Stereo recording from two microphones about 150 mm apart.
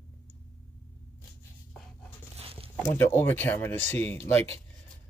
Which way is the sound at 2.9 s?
15° left (ahead or behind).